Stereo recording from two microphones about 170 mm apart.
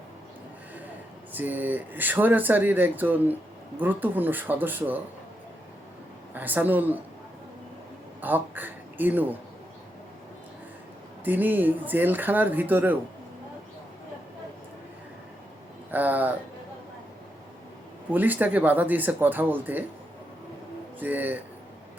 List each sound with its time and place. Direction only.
1.3 s speech: 10° right (ahead or behind)
6.3 s speech: 10° right (ahead or behind)
8.2 s speech: 10° right (ahead or behind)
11.3 s speech: 10° right (ahead or behind)
15.9 s speech: 10° right (ahead or behind)
18.1 s speech: 10° right (ahead or behind)
21.0 s speech: 10° right (ahead or behind)